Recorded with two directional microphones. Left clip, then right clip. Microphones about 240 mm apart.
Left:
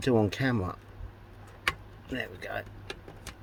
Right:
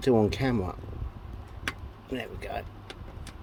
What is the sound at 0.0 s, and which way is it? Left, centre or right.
Speech, right.